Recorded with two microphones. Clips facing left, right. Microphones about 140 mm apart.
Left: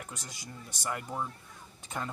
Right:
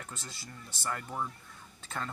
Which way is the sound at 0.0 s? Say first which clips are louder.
Left 1 dB; 15° left (ahead or behind).